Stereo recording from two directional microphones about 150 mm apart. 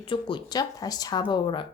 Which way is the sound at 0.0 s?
35° left (ahead or behind).